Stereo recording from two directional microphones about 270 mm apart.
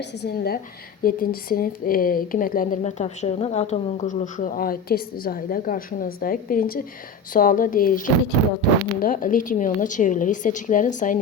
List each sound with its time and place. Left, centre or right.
0.0 s a woman's voice: left